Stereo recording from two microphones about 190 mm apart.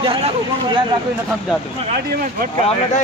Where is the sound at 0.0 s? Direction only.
25° right (ahead or behind).